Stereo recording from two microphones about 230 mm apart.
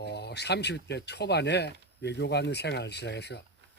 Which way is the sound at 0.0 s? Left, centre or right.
Left.